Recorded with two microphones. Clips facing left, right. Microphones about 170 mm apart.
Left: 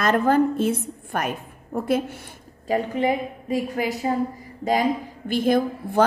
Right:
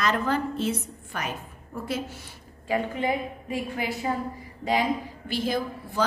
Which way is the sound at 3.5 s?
40° left (ahead or behind).